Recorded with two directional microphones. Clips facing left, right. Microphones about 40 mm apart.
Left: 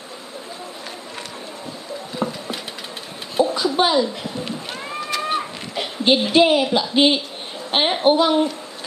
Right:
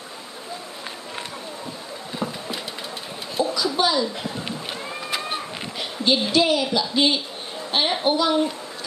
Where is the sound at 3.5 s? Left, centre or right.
Left.